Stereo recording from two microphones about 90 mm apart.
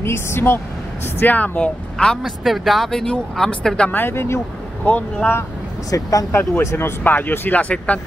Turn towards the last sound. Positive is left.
turn(degrees=15)  # may be behind; listen again after turning